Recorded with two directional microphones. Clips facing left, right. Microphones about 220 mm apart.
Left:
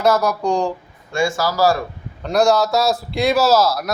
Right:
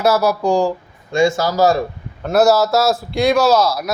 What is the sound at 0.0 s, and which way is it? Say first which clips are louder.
Speech: right 2 dB; 10° right (ahead or behind).